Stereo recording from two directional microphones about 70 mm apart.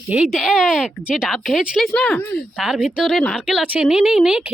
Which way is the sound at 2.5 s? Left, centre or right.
Centre.